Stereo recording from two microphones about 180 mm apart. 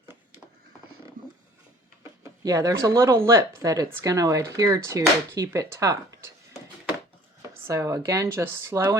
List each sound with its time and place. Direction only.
2.4 s speech: 20° right (ahead or behind)
7.5 s speech: 15° right (ahead or behind)